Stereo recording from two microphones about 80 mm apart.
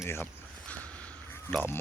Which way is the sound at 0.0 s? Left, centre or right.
Left.